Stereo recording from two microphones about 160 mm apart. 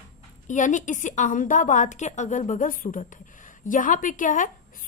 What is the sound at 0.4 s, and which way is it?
A woman's voice, 50° left (ahead or behind).